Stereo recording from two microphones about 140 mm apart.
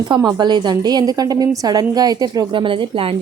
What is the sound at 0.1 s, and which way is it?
A woman's voice, 30° right (ahead or behind).